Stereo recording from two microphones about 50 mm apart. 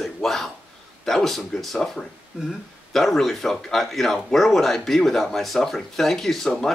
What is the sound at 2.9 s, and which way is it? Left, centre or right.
Speech, centre.